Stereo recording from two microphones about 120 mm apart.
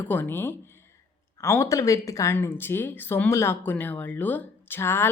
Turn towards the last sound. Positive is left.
turn(degrees=20)  # may be behind; listen again after turning